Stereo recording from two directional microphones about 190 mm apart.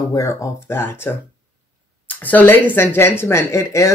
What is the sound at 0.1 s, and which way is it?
Speech, 15° left (ahead or behind).